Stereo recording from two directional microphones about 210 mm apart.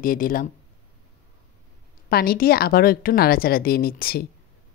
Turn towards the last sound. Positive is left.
turn(degrees=45)  # may be behind; listen again after turning